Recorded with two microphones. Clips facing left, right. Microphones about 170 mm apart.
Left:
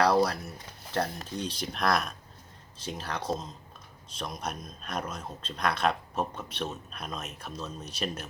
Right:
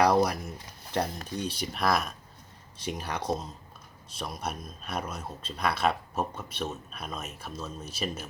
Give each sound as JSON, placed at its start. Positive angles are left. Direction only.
{"t": 0.0, "sound": "speech", "side_deg": -15}